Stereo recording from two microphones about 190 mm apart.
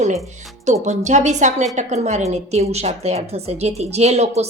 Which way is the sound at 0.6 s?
40° right (ahead or behind).